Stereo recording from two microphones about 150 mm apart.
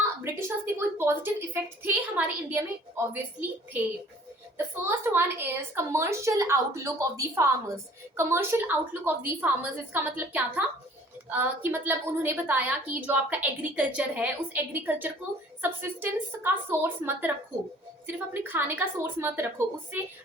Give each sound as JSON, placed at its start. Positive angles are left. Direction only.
{"t": 0.2, "sound": "a woman's voice", "side_deg": -15}
{"t": 4.5, "sound": "a woman's voice", "side_deg": -15}